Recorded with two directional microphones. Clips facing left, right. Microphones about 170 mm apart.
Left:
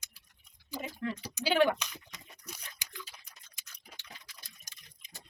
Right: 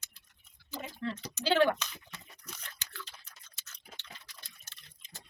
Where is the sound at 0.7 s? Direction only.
10° left (ahead or behind).